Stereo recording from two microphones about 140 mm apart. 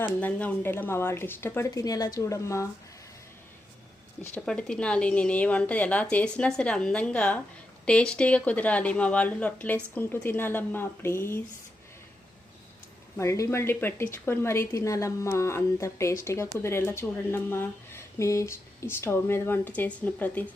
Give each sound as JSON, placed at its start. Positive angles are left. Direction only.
{"t": 0.2, "sound": "speech", "side_deg": 10}
{"t": 4.4, "sound": "speech", "side_deg": 5}
{"t": 13.1, "sound": "a woman's voice", "side_deg": 20}